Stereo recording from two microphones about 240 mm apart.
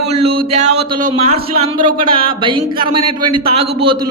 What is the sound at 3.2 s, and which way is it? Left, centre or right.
Speech, right.